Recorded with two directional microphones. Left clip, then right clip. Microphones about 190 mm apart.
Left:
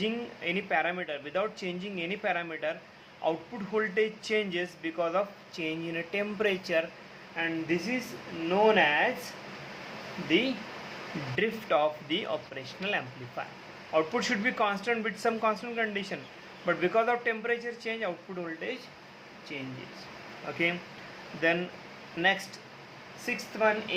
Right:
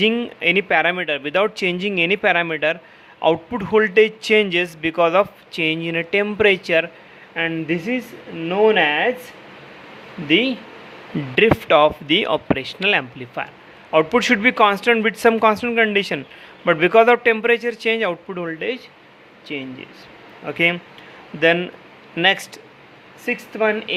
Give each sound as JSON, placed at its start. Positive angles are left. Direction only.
{"t": 0.0, "sound": "a man's voice", "side_deg": -50}
{"t": 10.2, "sound": "a man's voice", "side_deg": -55}
{"t": 22.2, "sound": "a man's voice", "side_deg": -50}